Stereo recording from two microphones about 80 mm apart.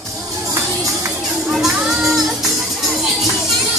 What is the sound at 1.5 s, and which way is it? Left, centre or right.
Music, centre.